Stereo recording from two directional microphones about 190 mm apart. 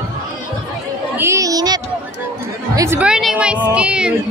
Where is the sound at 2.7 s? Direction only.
10° right (ahead or behind).